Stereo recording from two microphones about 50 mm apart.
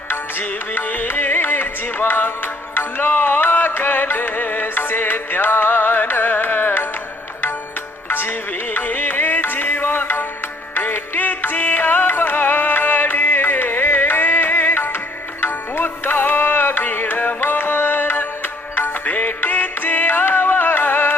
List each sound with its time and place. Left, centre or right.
0.1 s music: left
8.1 s music: left